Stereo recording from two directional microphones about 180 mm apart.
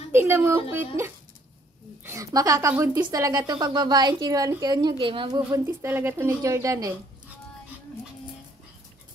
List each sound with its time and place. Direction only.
0.1 s a woman's voice: 15° right (ahead or behind)